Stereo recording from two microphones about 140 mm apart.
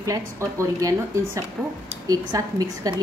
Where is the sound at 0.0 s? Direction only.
20° right (ahead or behind).